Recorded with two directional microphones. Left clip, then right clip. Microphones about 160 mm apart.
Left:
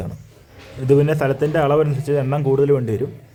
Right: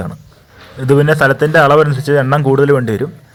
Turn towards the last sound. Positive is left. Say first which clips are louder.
# right 5 dB
turn(degrees=-10)  # may be behind; listen again after turning